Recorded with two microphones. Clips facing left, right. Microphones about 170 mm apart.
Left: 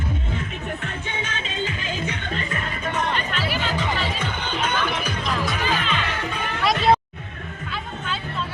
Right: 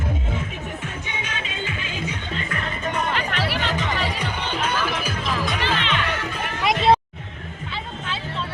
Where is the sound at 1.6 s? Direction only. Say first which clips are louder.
Left 2 dB; 40° left (ahead or behind).